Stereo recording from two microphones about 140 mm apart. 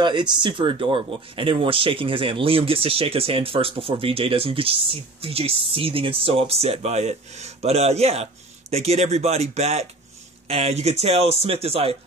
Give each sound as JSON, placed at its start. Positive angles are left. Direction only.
{"t": 0.0, "sound": "speech", "side_deg": -35}